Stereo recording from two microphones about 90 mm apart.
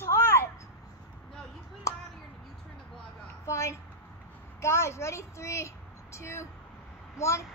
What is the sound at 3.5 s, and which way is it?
A child's voice, 30° left (ahead or behind).